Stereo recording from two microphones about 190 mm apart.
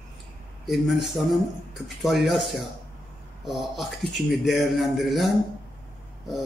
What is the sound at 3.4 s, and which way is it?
A man's voice, centre (ahead or behind).